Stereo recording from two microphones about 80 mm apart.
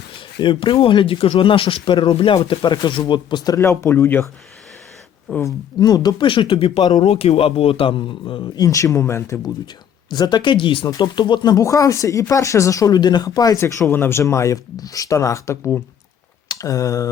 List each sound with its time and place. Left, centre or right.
0.3 s speech: left
3.6 s speech: left
5.3 s speech: left
5.8 s speech: left
6.2 s speech: left
8.6 s speech: left
10.1 s speech: left
11.5 s speech: left
13.6 s speech: left